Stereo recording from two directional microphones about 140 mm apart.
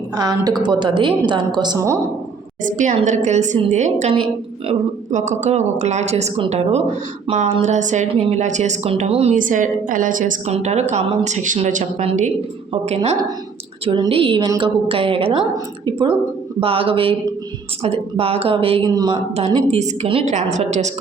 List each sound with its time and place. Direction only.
0.2 s a woman's voice: 30° right (ahead or behind)
2.6 s speech: 60° right (ahead or behind)
9.3 s a woman's voice: 70° right (ahead or behind)
10.5 s a woman's voice: 55° right (ahead or behind)
18.9 s speech: 30° right (ahead or behind)
19.5 s speech: 50° right (ahead or behind)